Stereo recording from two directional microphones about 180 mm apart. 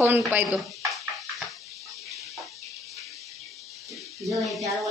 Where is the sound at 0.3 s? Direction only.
5° right (ahead or behind).